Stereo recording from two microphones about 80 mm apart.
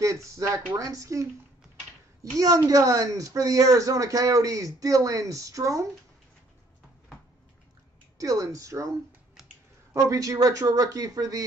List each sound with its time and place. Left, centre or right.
0.0 s speech: right
2.3 s speech: right
8.2 s speech: right
9.9 s speech: right